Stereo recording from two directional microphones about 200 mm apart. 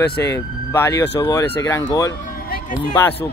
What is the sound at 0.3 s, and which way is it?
Speech, 15° left (ahead or behind).